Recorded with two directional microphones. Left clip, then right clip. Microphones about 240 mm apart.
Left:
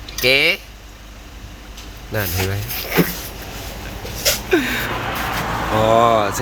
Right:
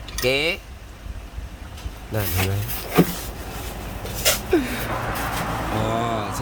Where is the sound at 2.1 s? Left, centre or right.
Centre.